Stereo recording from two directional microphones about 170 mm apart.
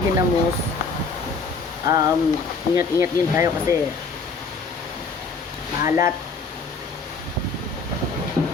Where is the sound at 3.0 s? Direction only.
15° right (ahead or behind).